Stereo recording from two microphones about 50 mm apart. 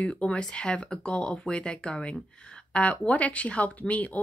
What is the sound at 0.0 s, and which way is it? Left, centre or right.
Speech, left.